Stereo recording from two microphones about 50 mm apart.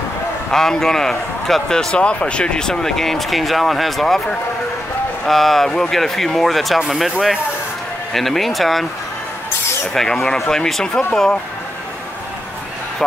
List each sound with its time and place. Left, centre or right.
0.5 s speech: centre
2.0 s speech: left; by 4.2 s centre
5.2 s speech: centre
10.5 s speech: centre